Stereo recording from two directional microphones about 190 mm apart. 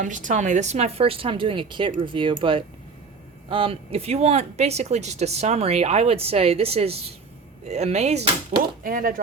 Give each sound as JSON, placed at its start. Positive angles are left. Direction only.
{"t": 0.0, "sound": "speech", "side_deg": -40}